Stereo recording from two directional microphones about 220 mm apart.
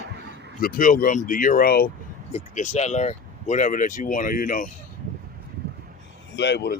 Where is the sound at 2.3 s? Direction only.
30° left (ahead or behind).